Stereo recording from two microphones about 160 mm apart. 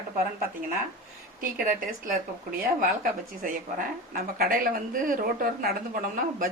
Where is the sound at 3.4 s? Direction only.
70° right (ahead or behind).